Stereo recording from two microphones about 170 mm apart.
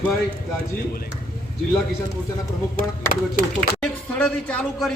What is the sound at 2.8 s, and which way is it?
Speech, 60° right (ahead or behind).